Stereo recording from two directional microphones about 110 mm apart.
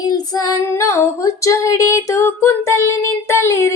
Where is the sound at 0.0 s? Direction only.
35° left (ahead or behind).